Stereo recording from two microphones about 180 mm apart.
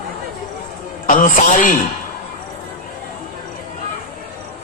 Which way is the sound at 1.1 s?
45° left (ahead or behind).